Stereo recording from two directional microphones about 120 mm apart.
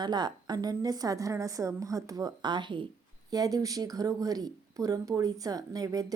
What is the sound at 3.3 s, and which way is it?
A woman's voice, 30° right (ahead or behind).